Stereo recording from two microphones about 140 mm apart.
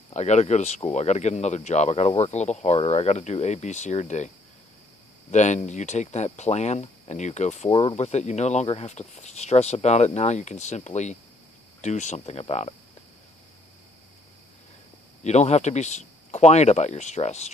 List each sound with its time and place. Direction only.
0.1 s speech: 55° left (ahead or behind)
5.3 s speech: 55° left (ahead or behind)
15.2 s speech: 50° left (ahead or behind)